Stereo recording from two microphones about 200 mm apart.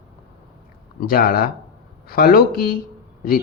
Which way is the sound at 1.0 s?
45° left (ahead or behind).